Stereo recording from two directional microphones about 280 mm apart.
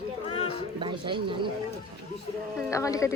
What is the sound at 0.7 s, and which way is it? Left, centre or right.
Speech, centre.